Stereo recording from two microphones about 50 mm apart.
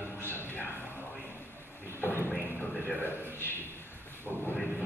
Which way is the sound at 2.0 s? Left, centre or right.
Left.